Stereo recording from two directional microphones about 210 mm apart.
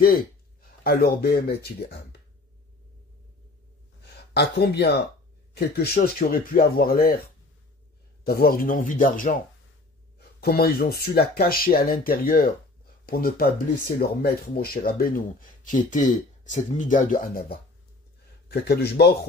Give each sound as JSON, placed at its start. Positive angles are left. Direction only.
{"t": 0.8, "sound": "speech", "side_deg": 50}
{"t": 4.0, "sound": "speech", "side_deg": 50}
{"t": 8.2, "sound": "speech", "side_deg": 45}